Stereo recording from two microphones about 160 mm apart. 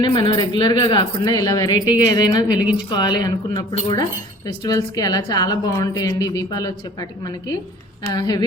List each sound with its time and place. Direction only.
0.0 s a woman's voice: 25° left (ahead or behind)